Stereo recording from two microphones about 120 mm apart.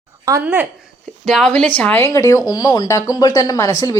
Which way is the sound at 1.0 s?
5° left (ahead or behind).